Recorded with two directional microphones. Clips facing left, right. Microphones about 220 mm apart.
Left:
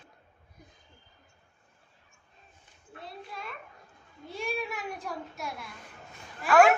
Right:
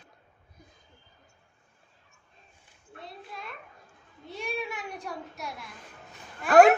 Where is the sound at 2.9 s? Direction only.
Centre (ahead or behind).